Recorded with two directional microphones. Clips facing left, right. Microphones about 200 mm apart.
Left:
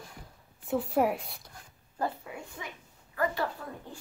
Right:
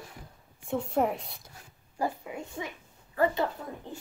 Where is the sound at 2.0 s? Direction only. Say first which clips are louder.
Right 2 dB; 20° right (ahead or behind).